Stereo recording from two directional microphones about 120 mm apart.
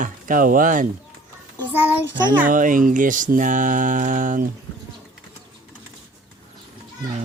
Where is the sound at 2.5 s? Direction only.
90° right.